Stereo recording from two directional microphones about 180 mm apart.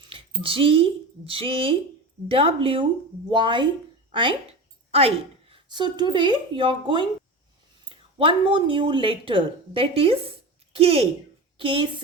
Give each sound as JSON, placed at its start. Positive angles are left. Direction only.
{"t": 0.1, "sound": "a woman's voice", "side_deg": -30}